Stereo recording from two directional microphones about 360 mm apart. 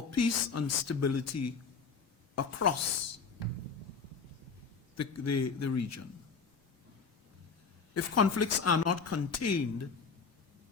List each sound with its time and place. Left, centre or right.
0.1 s speech: left
4.9 s speech: left
7.9 s speech: left